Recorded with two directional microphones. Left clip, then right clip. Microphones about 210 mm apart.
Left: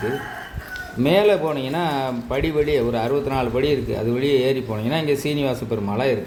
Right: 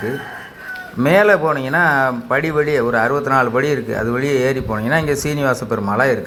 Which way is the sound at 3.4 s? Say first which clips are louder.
Right 4 dB; 40° right (ahead or behind).